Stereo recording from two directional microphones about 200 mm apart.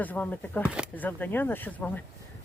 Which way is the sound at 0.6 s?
5° right (ahead or behind).